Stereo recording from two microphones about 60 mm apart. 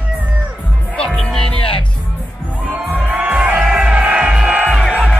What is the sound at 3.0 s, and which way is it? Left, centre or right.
Music, centre.